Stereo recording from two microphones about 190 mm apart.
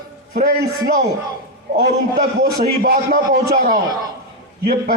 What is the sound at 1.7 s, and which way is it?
A man's voice, 50° right (ahead or behind).